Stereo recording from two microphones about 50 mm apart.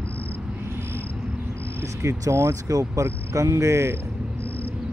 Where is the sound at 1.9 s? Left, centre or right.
Right.